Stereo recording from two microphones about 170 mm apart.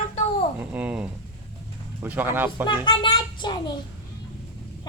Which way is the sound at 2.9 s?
25° left (ahead or behind).